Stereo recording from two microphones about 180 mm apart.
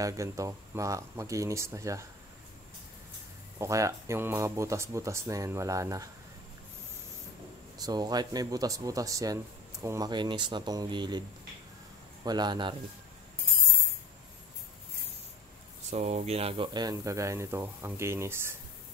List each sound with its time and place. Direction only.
0.0 s speech: 20° right (ahead or behind)
3.5 s speech: 15° right (ahead or behind)
7.8 s speech: 20° right (ahead or behind)
12.3 s speech: 25° right (ahead or behind)
15.9 s speech: 40° right (ahead or behind); by 18.6 s 15° right (ahead or behind)